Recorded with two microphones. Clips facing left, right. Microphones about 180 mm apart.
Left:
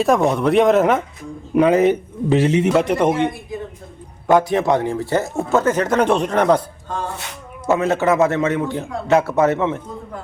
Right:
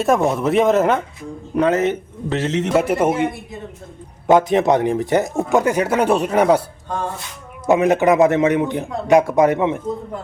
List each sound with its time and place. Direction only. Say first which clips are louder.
0.0 s speech: left 1 dB; centre (ahead or behind)
1.5 s speech: left 3 dB; 15° left (ahead or behind)
2.7 s speech: even; 5° right (ahead or behind)
4.3 s speech: right 2 dB; 20° right (ahead or behind)
7.7 s speech: right 3 dB; 15° right (ahead or behind)